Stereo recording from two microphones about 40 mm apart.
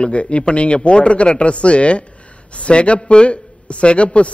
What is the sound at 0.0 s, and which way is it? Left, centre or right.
A man's voice, left.